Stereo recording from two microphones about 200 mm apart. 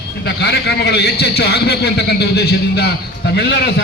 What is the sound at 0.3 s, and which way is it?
A man's voice, 55° left (ahead or behind).